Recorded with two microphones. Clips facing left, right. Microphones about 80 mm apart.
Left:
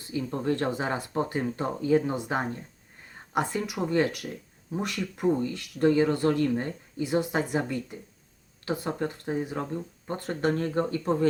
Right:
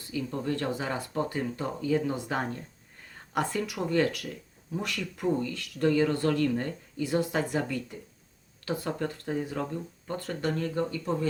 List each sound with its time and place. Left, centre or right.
0.1 s speech: left